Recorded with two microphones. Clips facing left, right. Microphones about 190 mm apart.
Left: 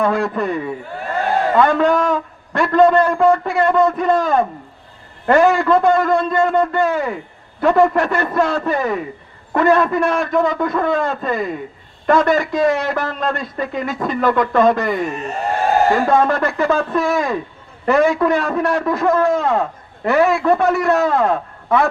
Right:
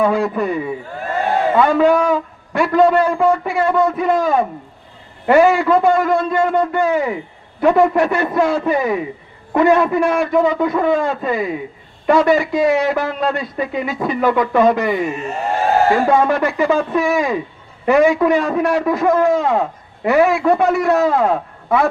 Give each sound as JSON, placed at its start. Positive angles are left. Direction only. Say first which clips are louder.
{"t": 0.0, "sound": "a man's voice", "louder": "right 2 dB", "side_deg": -10}
{"t": 15.1, "sound": "a man's voice", "louder": "right 1 dB", "side_deg": 35}
{"t": 15.9, "sound": "a man's voice", "louder": "right 1 dB", "side_deg": -10}